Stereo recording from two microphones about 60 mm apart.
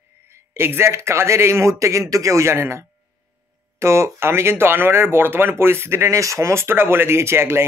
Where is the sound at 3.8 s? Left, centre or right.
Right.